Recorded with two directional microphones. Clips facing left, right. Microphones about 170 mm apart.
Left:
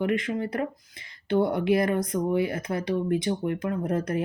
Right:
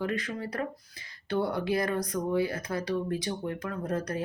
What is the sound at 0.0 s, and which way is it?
Speech, 25° left (ahead or behind).